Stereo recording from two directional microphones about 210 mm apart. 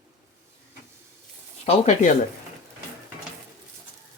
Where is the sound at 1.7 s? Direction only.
35° left (ahead or behind).